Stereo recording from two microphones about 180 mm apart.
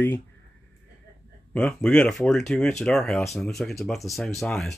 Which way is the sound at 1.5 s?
5° left (ahead or behind).